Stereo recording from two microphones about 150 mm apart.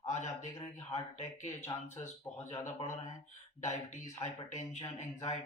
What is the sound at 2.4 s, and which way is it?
Speech, 45° left (ahead or behind).